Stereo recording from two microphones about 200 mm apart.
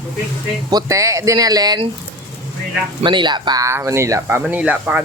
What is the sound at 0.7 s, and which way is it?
Speech, 15° right (ahead or behind).